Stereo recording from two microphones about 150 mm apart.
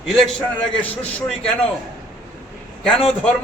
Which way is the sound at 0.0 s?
Centre (ahead or behind).